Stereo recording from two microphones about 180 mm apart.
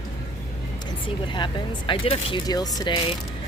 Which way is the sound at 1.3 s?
25° left (ahead or behind).